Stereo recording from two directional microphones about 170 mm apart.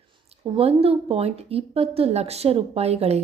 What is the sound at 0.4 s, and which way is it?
Speech, 35° right (ahead or behind).